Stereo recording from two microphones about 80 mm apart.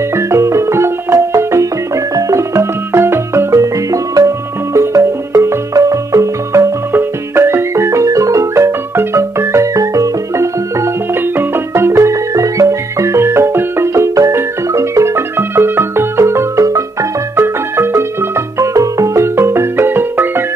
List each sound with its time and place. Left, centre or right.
0.1 s marimba: right
6.9 s music: right
17.4 s marimba: right
18.6 s music: right